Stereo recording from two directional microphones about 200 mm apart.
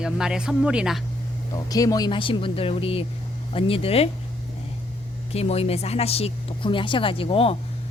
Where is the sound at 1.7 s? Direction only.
20° left (ahead or behind).